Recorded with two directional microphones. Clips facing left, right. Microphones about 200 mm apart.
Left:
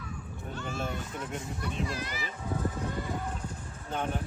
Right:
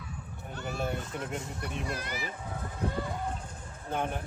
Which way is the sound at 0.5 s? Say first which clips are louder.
Right 2 dB; 55° right (ahead or behind).